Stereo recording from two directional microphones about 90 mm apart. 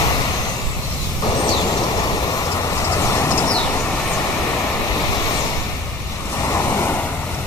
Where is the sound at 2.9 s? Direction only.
25° left (ahead or behind).